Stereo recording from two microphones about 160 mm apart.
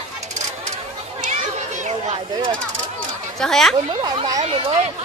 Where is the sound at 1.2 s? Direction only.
50° right (ahead or behind).